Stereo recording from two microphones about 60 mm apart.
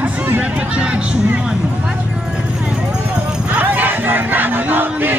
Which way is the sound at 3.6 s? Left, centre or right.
Right.